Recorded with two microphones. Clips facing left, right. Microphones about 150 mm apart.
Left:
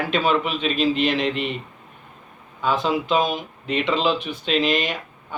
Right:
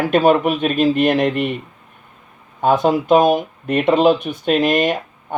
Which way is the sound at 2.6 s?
50° right (ahead or behind).